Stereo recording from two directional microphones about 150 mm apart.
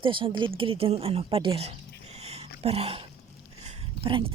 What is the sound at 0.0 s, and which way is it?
Speech, 35° right (ahead or behind).